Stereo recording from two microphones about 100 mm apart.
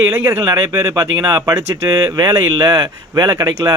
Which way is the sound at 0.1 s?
35° right (ahead or behind).